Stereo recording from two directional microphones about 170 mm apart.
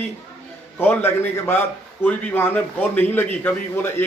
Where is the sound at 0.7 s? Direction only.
10° left (ahead or behind).